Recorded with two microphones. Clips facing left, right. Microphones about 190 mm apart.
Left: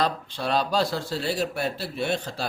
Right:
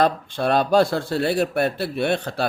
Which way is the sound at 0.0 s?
55° right (ahead or behind).